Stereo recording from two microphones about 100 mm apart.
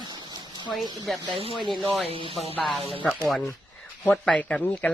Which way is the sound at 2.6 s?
Centre (ahead or behind).